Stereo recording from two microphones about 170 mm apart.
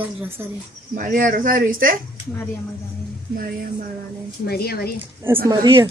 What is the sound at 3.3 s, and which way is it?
Speech, 55° right (ahead or behind).